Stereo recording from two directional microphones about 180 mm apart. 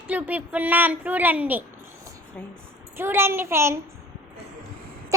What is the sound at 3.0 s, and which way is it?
Speech, 10° right (ahead or behind).